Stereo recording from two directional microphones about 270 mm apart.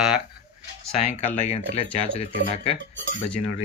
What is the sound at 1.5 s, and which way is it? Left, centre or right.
Speech, left.